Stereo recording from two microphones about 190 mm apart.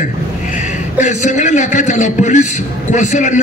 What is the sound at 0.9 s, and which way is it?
A man's voice, 40° left (ahead or behind).